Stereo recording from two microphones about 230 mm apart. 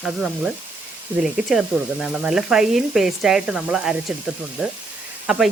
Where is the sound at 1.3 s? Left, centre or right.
Centre.